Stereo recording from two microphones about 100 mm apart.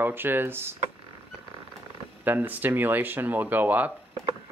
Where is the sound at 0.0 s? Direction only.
20° right (ahead or behind).